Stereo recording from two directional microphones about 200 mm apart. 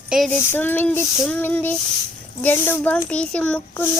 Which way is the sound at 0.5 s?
10° left (ahead or behind).